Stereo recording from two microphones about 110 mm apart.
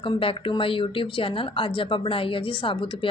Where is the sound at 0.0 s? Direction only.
55° left (ahead or behind).